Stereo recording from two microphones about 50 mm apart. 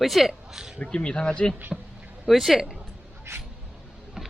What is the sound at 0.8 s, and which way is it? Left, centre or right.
Speech, left.